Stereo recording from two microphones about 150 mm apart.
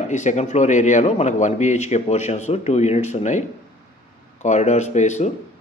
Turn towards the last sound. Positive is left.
turn(degrees=50)  # may be behind; listen again after turning